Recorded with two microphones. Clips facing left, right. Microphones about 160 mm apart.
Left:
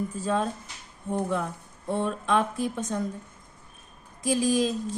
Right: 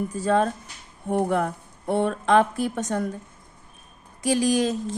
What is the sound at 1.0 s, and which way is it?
Speech, 65° right (ahead or behind).